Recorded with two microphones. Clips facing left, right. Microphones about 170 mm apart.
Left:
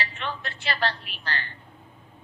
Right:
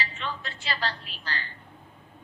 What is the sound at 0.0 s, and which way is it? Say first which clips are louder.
A woman's voice: left 2 dB; 65° left (ahead or behind).